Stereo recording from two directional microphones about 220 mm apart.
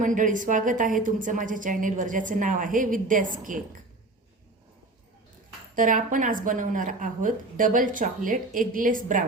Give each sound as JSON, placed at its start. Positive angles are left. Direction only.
{"t": 0.0, "sound": "a woman's voice", "side_deg": -35}
{"t": 5.7, "sound": "a woman's voice", "side_deg": -35}